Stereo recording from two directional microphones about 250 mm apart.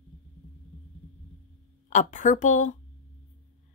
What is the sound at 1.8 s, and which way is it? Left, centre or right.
Speech, left.